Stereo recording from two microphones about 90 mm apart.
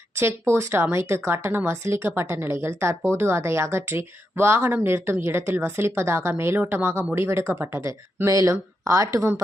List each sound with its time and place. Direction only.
0.2 s speech: 30° right (ahead or behind)